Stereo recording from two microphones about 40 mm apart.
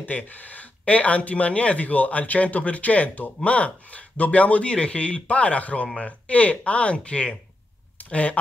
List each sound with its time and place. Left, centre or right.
0.0 s speech: left